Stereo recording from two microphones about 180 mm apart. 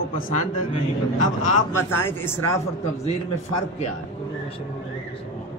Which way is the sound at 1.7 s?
15° left (ahead or behind).